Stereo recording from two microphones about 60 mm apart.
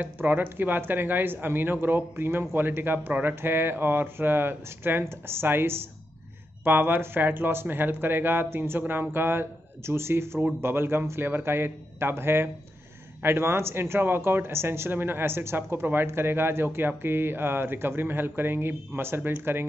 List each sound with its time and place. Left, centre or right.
0.0 s speech: right